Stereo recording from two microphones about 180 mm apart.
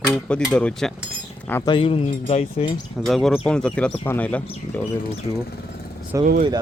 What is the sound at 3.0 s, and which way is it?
Speech, centre (ahead or behind).